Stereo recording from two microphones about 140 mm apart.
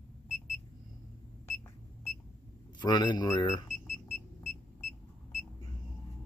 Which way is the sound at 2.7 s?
30° left (ahead or behind).